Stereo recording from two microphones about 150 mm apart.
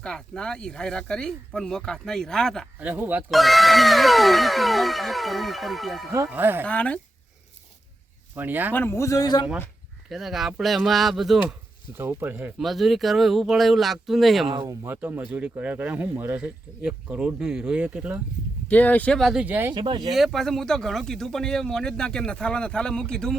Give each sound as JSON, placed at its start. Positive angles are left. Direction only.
{"t": 0.0, "sound": "speech", "side_deg": 5}
{"t": 2.7, "sound": "speech", "side_deg": -10}
{"t": 3.3, "sound": "speech", "side_deg": 0}
{"t": 6.1, "sound": "speech", "side_deg": -15}
{"t": 6.7, "sound": "speech", "side_deg": 10}
{"t": 8.4, "sound": "speech", "side_deg": -10}
{"t": 8.7, "sound": "a man's voice", "side_deg": 15}
{"t": 10.1, "sound": "speech", "side_deg": 0}
{"t": 11.9, "sound": "speech", "side_deg": -15}
{"t": 12.5, "sound": "speech", "side_deg": 0}
{"t": 14.6, "sound": "speech", "side_deg": -15}
{"t": 18.7, "sound": "speech", "side_deg": 10}
{"t": 19.7, "sound": "speech", "side_deg": -30}
{"t": 20.1, "sound": "speech", "side_deg": 0}